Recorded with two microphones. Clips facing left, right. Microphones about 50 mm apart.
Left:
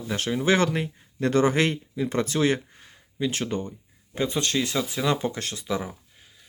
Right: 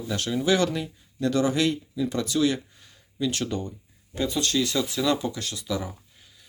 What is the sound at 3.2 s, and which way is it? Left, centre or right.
Speech, left.